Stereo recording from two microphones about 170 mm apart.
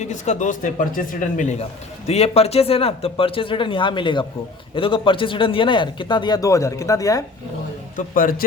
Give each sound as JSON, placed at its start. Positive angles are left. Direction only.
{"t": 0.0, "sound": "speech", "side_deg": 45}
{"t": 7.9, "sound": "a man's voice", "side_deg": 55}